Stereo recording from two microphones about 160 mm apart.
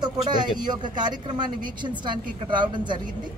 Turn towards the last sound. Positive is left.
turn(degrees=-30)  # may be behind; listen again after turning